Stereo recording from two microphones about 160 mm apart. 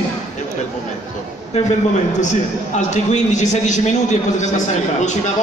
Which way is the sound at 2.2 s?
50° left (ahead or behind).